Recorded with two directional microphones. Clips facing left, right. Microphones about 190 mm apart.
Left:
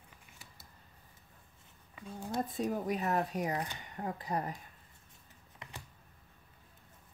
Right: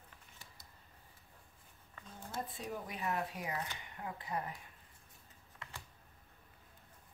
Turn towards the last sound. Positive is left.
turn(degrees=20)  # may be behind; listen again after turning